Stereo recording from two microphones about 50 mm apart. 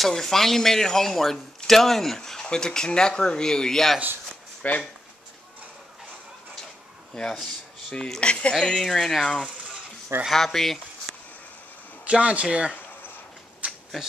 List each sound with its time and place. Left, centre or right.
0.0 s speech: centre
4.6 s speech: left
7.9 s speech: centre
8.5 s speech: centre
9.2 s speech: centre
10.3 s speech: centre
12.0 s speech: right
13.6 s a sound: right